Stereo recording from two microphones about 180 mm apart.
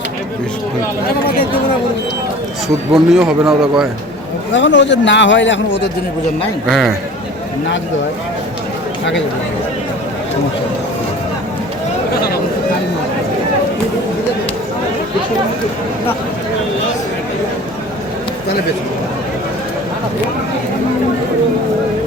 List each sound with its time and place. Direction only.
2.9 s a man's voice: 5° right (ahead or behind)
4.5 s a man's voice: 85° left
6.7 s a man's voice: centre (ahead or behind)